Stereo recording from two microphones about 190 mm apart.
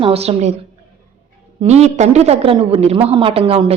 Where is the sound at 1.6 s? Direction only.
35° right (ahead or behind).